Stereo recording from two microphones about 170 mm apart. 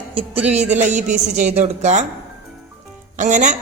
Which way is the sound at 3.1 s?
45° right (ahead or behind).